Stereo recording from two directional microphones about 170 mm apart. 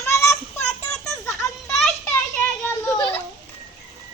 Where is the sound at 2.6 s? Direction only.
15° left (ahead or behind).